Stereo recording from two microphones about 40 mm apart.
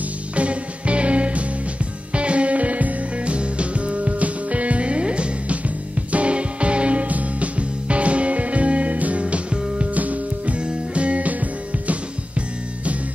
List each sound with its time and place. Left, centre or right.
0.4 s music: right
10.6 s music: right